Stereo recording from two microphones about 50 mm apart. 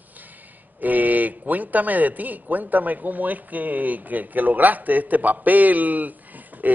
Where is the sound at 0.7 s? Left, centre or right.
Right.